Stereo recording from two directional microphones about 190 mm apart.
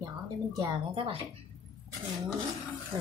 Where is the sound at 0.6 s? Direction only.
25° right (ahead or behind).